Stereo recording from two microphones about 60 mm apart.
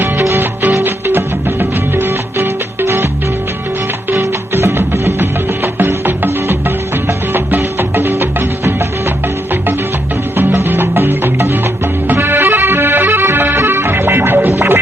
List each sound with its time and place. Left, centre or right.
0.0 s music: right
4.1 s music: right